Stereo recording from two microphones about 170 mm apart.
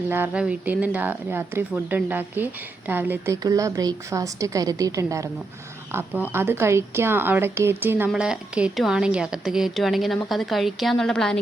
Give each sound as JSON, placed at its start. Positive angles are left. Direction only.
{"t": 0.1, "sound": "a woman's voice", "side_deg": -10}